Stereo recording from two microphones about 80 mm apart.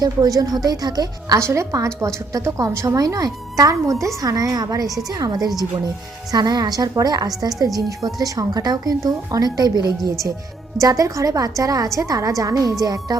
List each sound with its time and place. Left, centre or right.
0.0 s a woman's voice: right
1.4 s a woman's voice: right
10.8 s a woman's voice: right